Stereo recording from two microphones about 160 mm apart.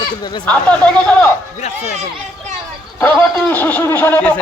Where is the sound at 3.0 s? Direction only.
15° left (ahead or behind).